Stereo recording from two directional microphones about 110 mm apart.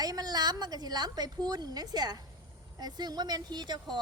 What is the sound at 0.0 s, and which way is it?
A woman's voice, 35° right (ahead or behind).